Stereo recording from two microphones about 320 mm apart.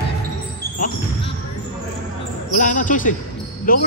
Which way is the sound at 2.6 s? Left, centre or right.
Left.